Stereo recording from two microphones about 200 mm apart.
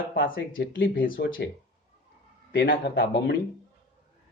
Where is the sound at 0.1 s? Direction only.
45° left (ahead or behind).